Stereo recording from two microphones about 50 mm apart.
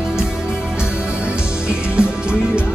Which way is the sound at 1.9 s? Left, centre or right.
Centre.